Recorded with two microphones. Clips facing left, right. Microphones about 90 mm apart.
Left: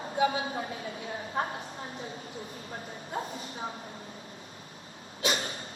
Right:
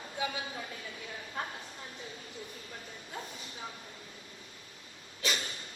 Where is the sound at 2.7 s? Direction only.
40° left (ahead or behind).